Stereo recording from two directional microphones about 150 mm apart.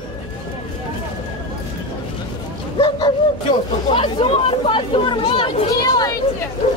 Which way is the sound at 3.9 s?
35° left (ahead or behind).